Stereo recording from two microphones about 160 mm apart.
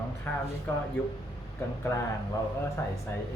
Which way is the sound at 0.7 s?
15° left (ahead or behind).